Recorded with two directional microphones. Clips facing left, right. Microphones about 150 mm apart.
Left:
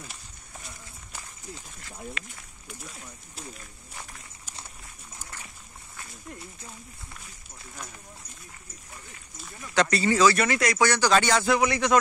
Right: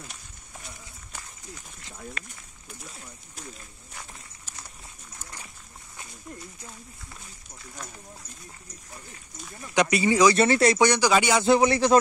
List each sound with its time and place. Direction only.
2.2 s a man's voice: 40° right (ahead or behind)
5.2 s a sound: 15° right (ahead or behind)
9.8 s speech: 15° right (ahead or behind)
10.3 s speech: 30° right (ahead or behind); by 11.4 s 10° right (ahead or behind)
11.4 s a man's voice: 30° right (ahead or behind)